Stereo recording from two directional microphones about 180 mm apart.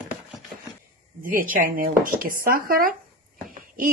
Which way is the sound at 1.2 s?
50° right (ahead or behind).